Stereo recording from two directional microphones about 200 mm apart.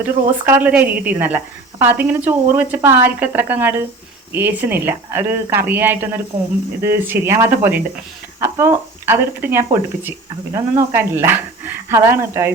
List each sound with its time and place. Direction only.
0.0 s speech: 10° right (ahead or behind)